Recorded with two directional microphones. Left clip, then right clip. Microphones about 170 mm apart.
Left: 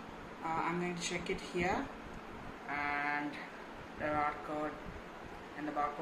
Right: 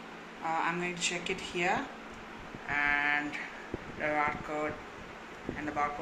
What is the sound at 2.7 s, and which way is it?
Speech, centre (ahead or behind).